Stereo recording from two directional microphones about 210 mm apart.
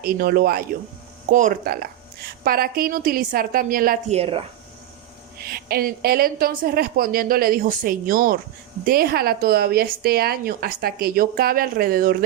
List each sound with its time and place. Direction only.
0.0 s speech: 45° right (ahead or behind)
4.2 s speech: 25° right (ahead or behind)
5.4 s speech: 45° right (ahead or behind)